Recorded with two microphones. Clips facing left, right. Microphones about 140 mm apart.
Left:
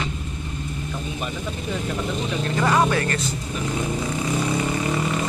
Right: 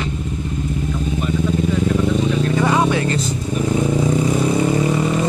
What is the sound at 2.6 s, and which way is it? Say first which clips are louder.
Vehicle: even; 10° right (ahead or behind).